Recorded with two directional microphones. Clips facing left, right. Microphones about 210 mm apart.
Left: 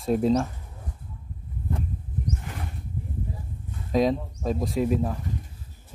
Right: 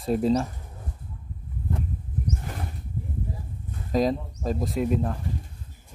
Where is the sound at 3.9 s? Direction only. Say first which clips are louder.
Left 1 dB; centre (ahead or behind).